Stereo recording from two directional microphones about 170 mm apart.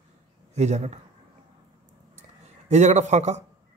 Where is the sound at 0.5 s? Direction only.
45° right (ahead or behind).